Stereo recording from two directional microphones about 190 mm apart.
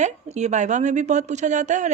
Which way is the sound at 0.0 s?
35° right (ahead or behind).